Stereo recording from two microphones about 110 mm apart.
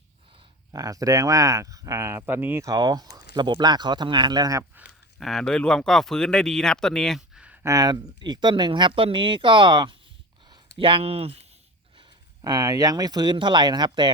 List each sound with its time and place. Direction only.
0.7 s speech: 35° right (ahead or behind)
2.6 s speech: 35° right (ahead or behind)
5.2 s speech: 5° left (ahead or behind)
7.3 s a sound: 10° right (ahead or behind)
7.6 s speech: 30° right (ahead or behind); by 11.4 s 65° right (ahead or behind)
12.4 s speech: 35° right (ahead or behind)